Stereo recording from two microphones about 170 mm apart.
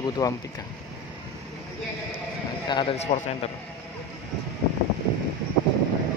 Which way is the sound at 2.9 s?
40° left (ahead or behind).